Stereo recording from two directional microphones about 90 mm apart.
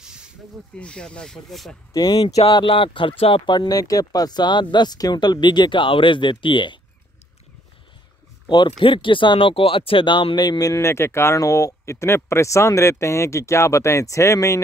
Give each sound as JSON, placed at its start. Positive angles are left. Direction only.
{"t": 0.7, "sound": "speech", "side_deg": 10}
{"t": 2.0, "sound": "speech", "side_deg": 45}
{"t": 2.2, "sound": "speech", "side_deg": 85}
{"t": 3.5, "sound": "speech", "side_deg": 45}
{"t": 8.5, "sound": "speech", "side_deg": 55}
{"t": 10.7, "sound": "speech", "side_deg": 30}